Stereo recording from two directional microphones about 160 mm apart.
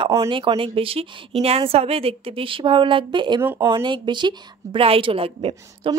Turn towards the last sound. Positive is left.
turn(degrees=-35)  # may be behind; listen again after turning